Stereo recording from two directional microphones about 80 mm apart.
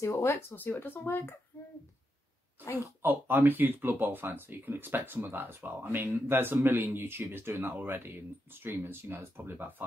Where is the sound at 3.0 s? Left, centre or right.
Right.